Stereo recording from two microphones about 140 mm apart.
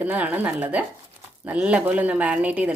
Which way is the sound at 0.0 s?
10° right (ahead or behind).